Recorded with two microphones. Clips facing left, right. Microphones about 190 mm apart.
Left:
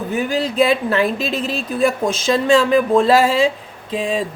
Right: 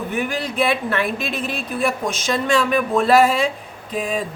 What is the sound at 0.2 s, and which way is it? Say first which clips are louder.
Speech: left 5 dB; 30° left (ahead or behind).